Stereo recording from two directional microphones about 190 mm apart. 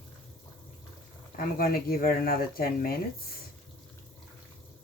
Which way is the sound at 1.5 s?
50° left (ahead or behind).